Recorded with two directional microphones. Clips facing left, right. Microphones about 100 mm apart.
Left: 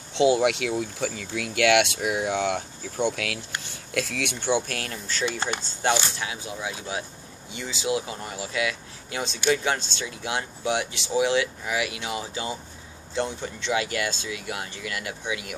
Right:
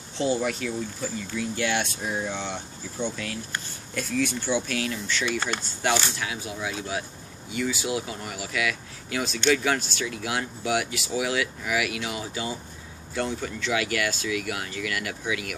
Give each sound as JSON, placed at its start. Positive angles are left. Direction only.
{"t": 0.1, "sound": "speech", "side_deg": 70}
{"t": 5.2, "sound": "speech", "side_deg": 30}